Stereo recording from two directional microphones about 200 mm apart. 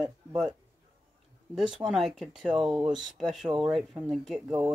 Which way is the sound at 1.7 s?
Centre (ahead or behind).